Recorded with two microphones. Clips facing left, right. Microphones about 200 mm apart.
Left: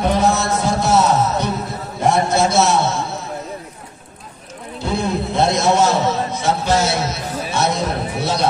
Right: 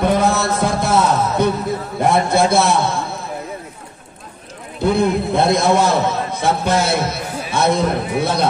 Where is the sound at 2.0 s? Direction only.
55° right (ahead or behind).